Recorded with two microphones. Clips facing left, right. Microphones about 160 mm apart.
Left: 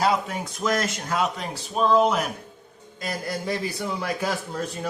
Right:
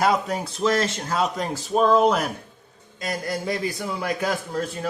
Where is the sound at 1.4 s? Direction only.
45° right (ahead or behind).